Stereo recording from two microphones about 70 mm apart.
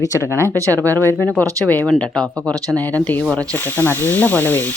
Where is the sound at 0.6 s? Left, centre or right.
Right.